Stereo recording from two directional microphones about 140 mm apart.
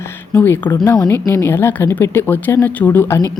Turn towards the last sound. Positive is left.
turn(degrees=15)  # may be behind; listen again after turning